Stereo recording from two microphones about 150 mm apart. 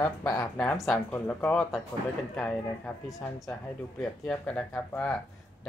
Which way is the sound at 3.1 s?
20° left (ahead or behind).